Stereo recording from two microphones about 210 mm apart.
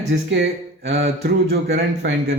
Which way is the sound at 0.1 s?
60° right (ahead or behind).